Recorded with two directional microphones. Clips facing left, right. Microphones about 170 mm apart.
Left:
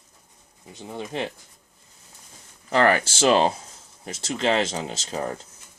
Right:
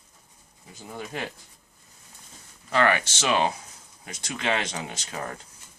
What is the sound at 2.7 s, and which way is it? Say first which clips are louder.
Speech: left 3 dB; 35° left (ahead or behind).